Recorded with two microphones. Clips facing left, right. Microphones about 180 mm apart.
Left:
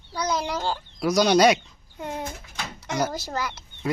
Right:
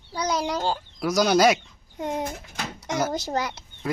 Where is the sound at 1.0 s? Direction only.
Centre (ahead or behind).